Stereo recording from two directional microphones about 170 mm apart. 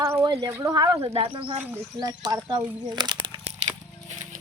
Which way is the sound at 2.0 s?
20° right (ahead or behind).